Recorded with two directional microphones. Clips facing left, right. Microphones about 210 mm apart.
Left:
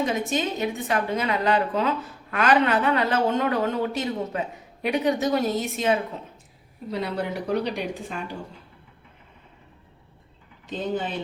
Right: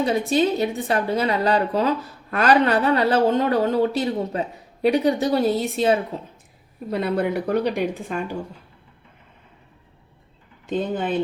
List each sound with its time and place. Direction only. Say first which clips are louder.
0.0 s a woman's voice: right 5 dB; 35° right (ahead or behind)
6.9 s speech: right 6 dB; 55° right (ahead or behind)
10.7 s speech: right 4 dB; 55° right (ahead or behind)